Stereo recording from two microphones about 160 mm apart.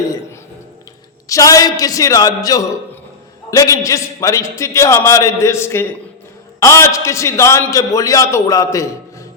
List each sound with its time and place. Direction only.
1.3 s a man's voice: 20° left (ahead or behind)